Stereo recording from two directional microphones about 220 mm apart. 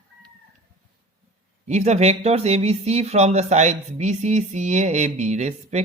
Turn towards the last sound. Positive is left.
turn(degrees=-30)  # may be behind; listen again after turning